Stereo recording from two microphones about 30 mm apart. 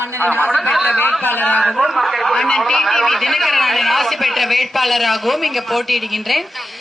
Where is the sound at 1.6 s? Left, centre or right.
Centre.